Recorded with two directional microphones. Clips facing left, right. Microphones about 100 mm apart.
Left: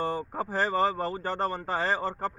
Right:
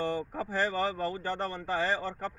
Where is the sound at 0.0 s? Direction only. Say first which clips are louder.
Left 2 dB; 40° left (ahead or behind).